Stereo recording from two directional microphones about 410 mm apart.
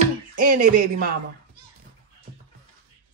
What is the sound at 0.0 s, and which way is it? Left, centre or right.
Music, centre.